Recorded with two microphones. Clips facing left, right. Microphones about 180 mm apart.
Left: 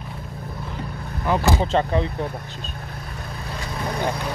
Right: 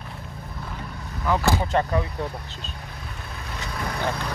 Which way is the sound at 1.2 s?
20° left (ahead or behind).